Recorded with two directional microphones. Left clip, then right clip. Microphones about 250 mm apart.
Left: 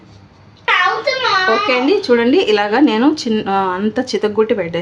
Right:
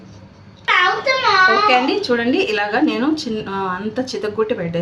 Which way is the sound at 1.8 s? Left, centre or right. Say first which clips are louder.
Left 5 dB; left.